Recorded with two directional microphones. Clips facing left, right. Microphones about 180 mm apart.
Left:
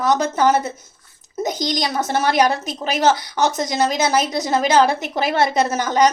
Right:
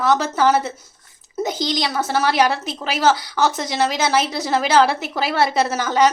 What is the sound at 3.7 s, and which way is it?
Speech, 45° left (ahead or behind).